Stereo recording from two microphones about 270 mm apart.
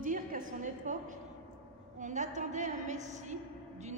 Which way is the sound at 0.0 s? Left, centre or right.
Right.